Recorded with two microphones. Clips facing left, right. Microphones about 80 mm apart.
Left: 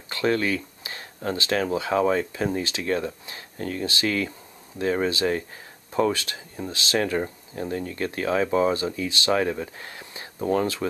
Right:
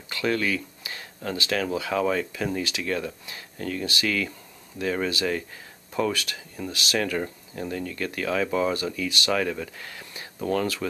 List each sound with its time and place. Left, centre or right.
0.1 s speech: left